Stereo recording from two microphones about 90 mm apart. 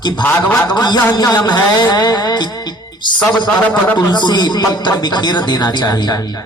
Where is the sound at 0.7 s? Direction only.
50° left (ahead or behind).